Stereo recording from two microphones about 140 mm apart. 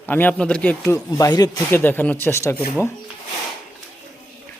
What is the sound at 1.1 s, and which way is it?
Speech, 25° left (ahead or behind).